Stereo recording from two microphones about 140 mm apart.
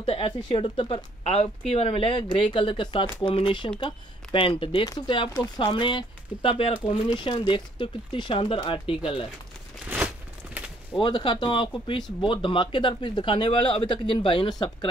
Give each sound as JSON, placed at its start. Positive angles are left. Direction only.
{"t": 0.0, "sound": "speech", "side_deg": 45}
{"t": 9.8, "sound": "a sound", "side_deg": -10}
{"t": 11.0, "sound": "speech", "side_deg": 35}